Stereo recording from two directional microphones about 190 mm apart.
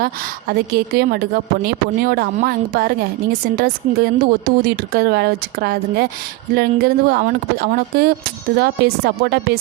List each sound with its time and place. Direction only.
0.0 s a woman's voice: 50° right (ahead or behind)